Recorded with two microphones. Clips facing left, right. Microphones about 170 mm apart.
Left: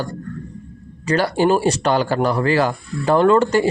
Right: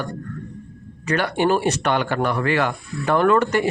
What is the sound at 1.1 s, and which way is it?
Speech, 35° left (ahead or behind).